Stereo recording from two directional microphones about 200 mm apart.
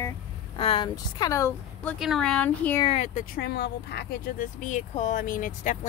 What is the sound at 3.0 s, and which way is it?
A woman's voice, 45° left (ahead or behind).